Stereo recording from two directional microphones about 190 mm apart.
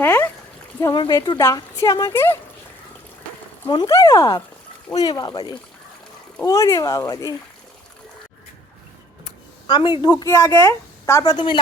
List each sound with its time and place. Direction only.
0.0 s a sound: 10° left (ahead or behind)
0.8 s speech: 20° left (ahead or behind)
3.7 s speech: 20° left (ahead or behind)
9.6 s speech: 25° left (ahead or behind)